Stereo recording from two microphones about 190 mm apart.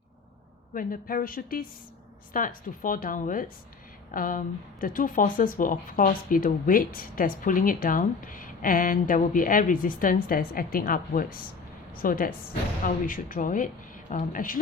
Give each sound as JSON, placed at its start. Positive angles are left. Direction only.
{"t": 0.7, "sound": "speech", "side_deg": 45}